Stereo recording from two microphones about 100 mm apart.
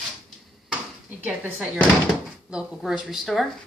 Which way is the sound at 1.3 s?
10° right (ahead or behind).